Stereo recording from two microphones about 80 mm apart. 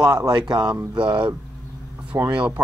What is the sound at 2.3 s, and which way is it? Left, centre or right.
Speech, centre.